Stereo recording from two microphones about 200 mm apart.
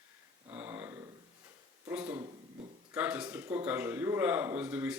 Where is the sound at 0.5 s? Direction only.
10° right (ahead or behind).